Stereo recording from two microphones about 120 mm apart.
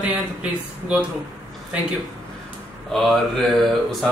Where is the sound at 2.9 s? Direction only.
Centre (ahead or behind).